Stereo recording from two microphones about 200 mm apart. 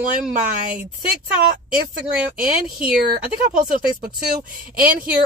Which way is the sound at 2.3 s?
45° right (ahead or behind).